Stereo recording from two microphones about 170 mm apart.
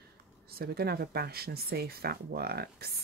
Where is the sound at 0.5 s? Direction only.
65° right (ahead or behind).